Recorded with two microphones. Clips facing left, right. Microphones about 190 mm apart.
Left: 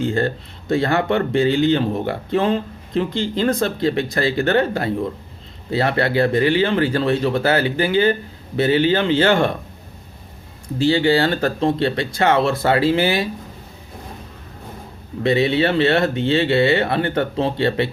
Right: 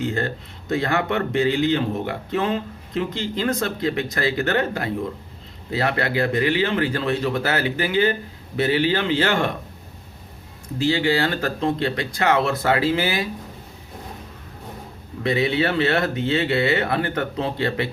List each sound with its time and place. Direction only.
0.0 s speech: 30° left (ahead or behind)
10.8 s speech: 30° left (ahead or behind)
15.2 s speech: 25° left (ahead or behind)